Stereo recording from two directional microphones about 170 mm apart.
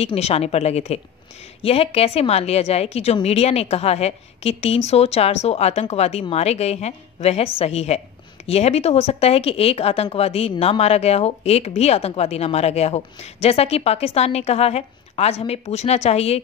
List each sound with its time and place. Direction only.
0.0 s speech: 35° left (ahead or behind)